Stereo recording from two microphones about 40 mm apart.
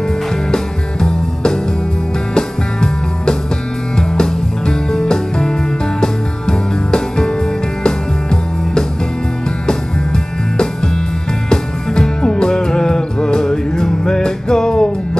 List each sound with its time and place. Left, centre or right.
1.0 s music: centre
11.4 s music: centre